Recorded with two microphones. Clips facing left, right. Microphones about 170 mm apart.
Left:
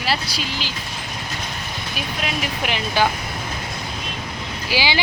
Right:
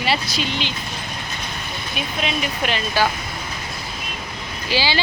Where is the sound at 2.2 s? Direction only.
5° left (ahead or behind).